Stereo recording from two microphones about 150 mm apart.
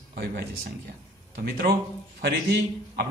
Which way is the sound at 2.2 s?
90° right.